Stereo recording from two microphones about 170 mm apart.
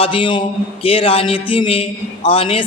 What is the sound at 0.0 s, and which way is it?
A man's voice, 30° left (ahead or behind).